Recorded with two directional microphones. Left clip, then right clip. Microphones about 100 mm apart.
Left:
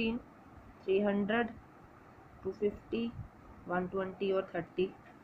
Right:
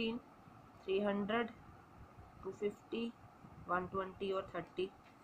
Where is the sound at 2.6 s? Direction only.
Centre (ahead or behind).